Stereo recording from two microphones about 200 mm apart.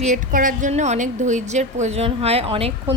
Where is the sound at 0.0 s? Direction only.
40° right (ahead or behind).